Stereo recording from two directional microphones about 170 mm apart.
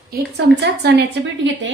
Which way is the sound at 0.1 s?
75° right (ahead or behind).